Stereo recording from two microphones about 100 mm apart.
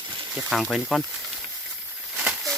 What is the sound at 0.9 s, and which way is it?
Speech, 5° right (ahead or behind).